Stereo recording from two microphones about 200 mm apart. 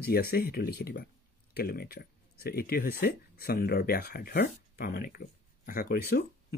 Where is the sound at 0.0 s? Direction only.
50° left (ahead or behind).